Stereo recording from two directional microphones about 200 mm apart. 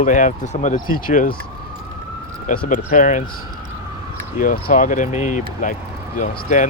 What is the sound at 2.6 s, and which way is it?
Speech, 40° left (ahead or behind).